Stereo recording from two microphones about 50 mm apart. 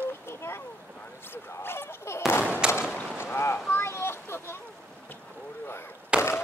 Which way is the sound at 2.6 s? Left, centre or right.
Centre.